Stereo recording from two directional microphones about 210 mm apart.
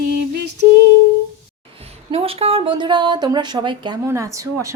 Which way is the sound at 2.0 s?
25° right (ahead or behind).